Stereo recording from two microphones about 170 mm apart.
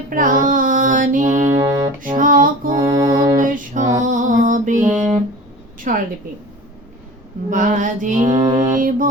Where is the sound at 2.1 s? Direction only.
50° right (ahead or behind).